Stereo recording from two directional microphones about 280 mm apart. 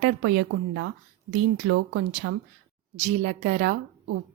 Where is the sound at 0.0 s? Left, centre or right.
Right.